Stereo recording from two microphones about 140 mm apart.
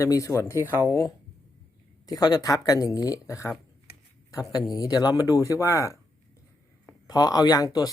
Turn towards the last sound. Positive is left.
turn(degrees=25)  # may be behind; listen again after turning